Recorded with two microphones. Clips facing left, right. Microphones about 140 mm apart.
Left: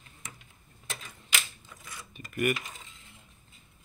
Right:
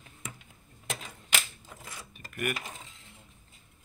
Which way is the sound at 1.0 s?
65° right (ahead or behind).